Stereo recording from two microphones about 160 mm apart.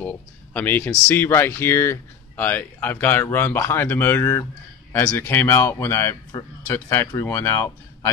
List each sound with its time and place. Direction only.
0.0 s speech: 10° left (ahead or behind)